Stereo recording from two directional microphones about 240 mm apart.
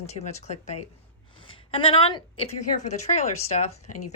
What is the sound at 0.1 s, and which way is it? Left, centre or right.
A woman's voice, left.